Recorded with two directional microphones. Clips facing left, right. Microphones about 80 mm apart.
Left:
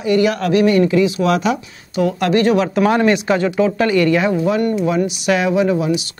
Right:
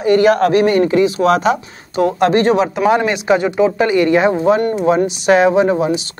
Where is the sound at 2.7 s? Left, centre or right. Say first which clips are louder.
Even; centre.